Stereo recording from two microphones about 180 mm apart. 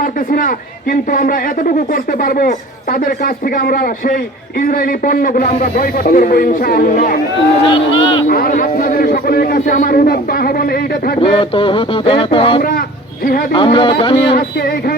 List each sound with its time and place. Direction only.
0.0 s speech: 50° left (ahead or behind)
7.7 s speech: 30° left (ahead or behind)
8.3 s a man's voice: 55° left (ahead or behind)
11.2 s speech: 30° left (ahead or behind)
14.3 s a man's voice: 55° left (ahead or behind)